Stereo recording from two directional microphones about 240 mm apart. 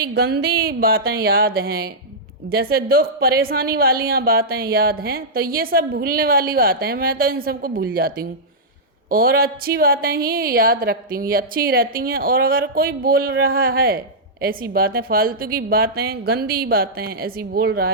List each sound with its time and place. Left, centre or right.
0.0 s a woman's voice: right